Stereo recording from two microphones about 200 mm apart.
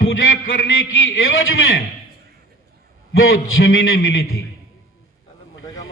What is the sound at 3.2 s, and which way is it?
Speech, 90° left.